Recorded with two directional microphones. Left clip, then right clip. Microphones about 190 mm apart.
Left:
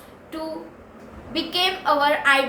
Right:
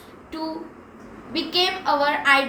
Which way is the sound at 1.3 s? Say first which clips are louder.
Even; 15° left (ahead or behind).